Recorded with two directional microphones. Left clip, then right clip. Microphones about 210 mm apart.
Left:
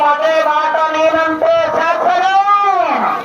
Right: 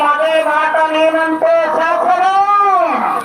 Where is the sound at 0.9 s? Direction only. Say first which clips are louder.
Even; 35° left (ahead or behind).